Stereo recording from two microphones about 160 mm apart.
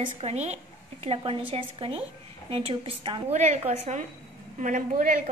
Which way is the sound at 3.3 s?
45° right (ahead or behind).